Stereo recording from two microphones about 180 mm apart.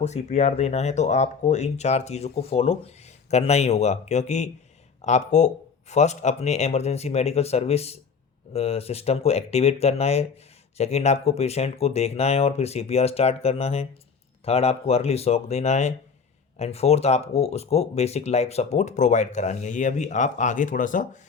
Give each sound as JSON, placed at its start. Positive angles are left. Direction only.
{"t": 0.0, "sound": "speech", "side_deg": 40}